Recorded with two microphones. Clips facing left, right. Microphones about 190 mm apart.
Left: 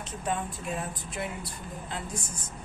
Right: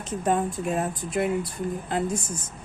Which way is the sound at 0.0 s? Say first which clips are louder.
Right 8 dB; 50° right (ahead or behind).